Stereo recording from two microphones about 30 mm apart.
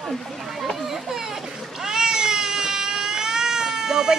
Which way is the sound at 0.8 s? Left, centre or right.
Centre.